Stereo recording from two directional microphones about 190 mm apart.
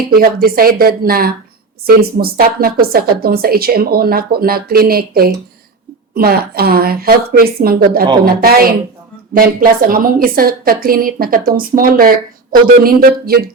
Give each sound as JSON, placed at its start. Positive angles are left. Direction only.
{"t": 0.1, "sound": "a woman's voice", "side_deg": -50}